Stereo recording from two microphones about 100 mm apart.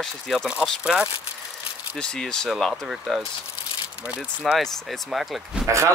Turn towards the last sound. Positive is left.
turn(degrees=0)  # may be behind; listen again after turning